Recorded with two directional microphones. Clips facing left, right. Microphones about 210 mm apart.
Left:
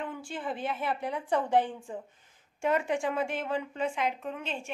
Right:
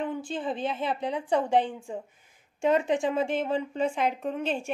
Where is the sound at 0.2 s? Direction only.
20° right (ahead or behind).